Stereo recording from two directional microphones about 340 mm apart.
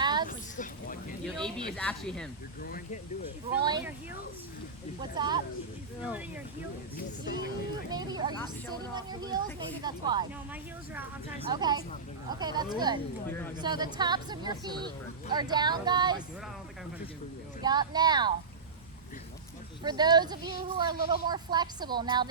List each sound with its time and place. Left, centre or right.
0.0 s a sound: centre
0.3 s a sound: left
1.7 s speech: centre
2.6 s vehicle: left
3.5 s speech: centre
5.1 s speech: centre
6.9 s speech: left
7.9 s speech: centre
13.2 s speech: centre
13.6 s speech: centre
17.6 s speech: centre
19.8 s speech: centre